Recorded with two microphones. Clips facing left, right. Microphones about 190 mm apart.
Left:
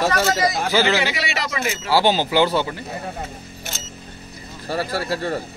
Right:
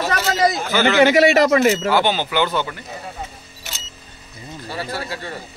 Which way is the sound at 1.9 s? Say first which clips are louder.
Even; 35° left (ahead or behind).